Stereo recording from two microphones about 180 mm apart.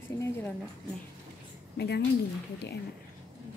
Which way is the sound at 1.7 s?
65° left (ahead or behind).